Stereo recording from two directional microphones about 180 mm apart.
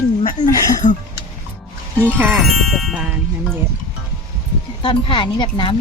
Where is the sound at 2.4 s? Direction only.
Centre (ahead or behind).